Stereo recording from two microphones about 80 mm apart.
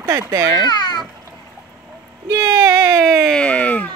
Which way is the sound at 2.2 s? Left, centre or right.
Right.